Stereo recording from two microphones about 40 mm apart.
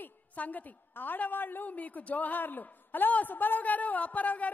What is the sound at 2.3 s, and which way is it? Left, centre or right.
A man's voice, left.